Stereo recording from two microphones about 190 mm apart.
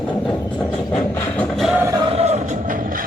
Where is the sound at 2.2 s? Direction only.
35° right (ahead or behind).